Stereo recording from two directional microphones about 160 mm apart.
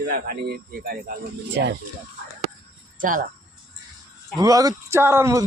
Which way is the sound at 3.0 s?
60° right (ahead or behind).